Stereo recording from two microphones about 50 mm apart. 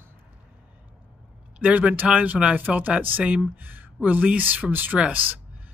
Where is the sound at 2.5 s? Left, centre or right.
Right.